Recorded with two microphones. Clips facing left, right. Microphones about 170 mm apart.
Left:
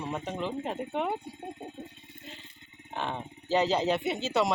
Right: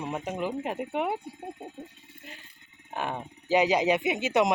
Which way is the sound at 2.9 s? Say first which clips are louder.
Right 2 dB; 10° right (ahead or behind).